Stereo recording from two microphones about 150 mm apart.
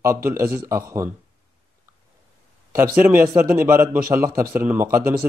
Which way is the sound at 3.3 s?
20° right (ahead or behind).